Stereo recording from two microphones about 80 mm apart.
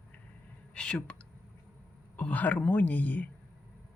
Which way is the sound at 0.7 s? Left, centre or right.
Centre.